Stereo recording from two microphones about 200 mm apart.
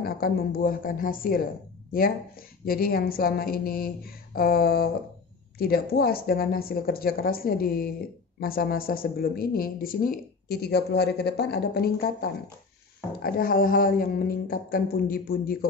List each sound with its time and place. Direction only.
0.0 s speech: 50° left (ahead or behind)